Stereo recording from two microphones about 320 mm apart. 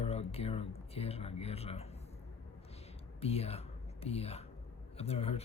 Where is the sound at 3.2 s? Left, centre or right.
Centre.